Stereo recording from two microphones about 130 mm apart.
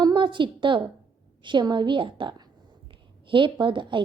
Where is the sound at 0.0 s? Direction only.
35° right (ahead or behind).